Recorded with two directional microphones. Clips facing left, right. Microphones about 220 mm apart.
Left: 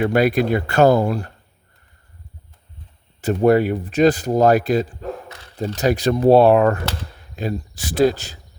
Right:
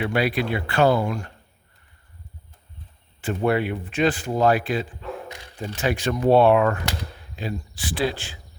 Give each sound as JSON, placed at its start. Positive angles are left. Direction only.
{"t": 0.0, "sound": "speech", "side_deg": 45}
{"t": 3.2, "sound": "speech", "side_deg": 40}